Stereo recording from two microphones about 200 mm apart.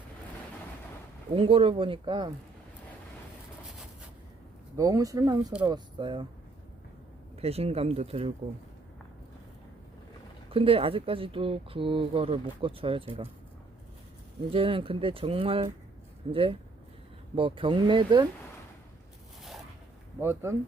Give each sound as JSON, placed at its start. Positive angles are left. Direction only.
{"t": 1.4, "sound": "speech", "side_deg": -25}
{"t": 4.8, "sound": "speech", "side_deg": -15}
{"t": 7.4, "sound": "speech", "side_deg": -30}
{"t": 10.5, "sound": "speech", "side_deg": -25}
{"t": 14.5, "sound": "speech", "side_deg": -25}
{"t": 20.2, "sound": "speech", "side_deg": -15}